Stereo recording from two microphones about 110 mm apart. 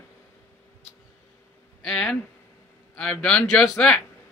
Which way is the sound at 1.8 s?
5° left (ahead or behind).